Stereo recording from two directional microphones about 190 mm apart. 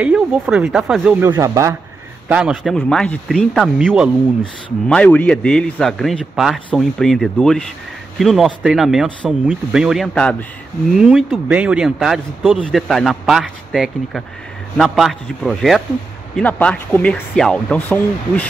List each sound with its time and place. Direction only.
0.0 s speech: 5° right (ahead or behind)
1.3 s speech: 15° right (ahead or behind)
2.2 s speech: 5° right (ahead or behind)